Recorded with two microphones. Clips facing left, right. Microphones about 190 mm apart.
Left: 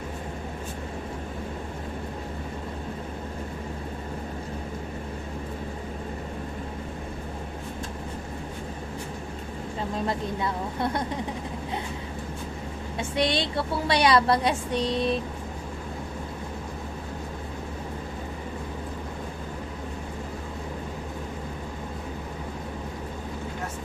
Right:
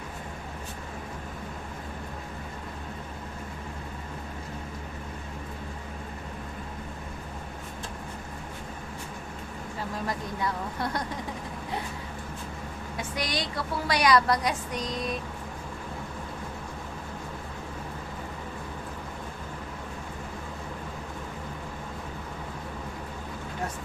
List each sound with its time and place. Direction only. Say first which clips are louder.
10.1 s a woman's voice: left 3 dB; 25° left (ahead or behind)
13.0 s a woman's voice: left 7 dB; 25° left (ahead or behind)